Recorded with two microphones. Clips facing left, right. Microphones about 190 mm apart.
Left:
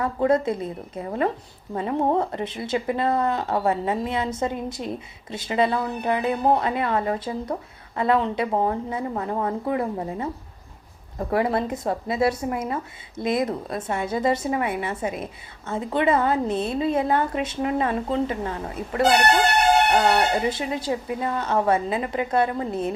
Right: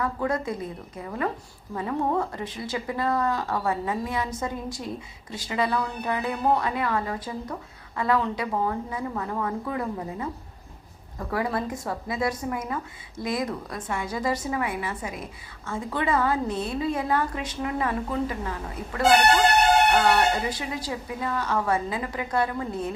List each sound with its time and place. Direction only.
0.0 s a woman's voice: 25° left (ahead or behind)
20.3 s a woman's voice: 25° left (ahead or behind)